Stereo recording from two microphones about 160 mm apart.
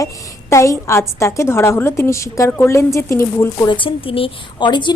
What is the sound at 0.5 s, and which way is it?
A woman's voice, 20° left (ahead or behind).